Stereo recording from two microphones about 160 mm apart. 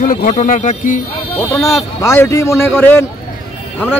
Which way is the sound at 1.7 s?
20° left (ahead or behind).